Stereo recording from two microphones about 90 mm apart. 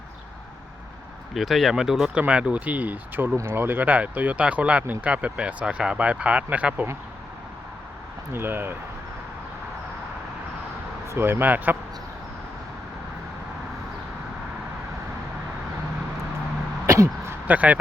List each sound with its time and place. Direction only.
1.3 s speech: centre (ahead or behind); by 6.8 s 15° right (ahead or behind)
8.3 s speech: 25° right (ahead or behind)
11.1 s speech: 25° right (ahead or behind)
16.8 s a sound: 30° right (ahead or behind)
17.5 s speech: 15° right (ahead or behind)